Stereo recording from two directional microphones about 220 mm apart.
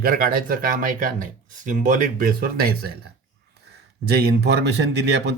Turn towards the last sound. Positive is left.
turn(degrees=-50)  # may be behind; listen again after turning